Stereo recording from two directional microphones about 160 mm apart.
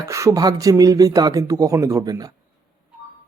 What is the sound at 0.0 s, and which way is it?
A man's voice, 20° right (ahead or behind).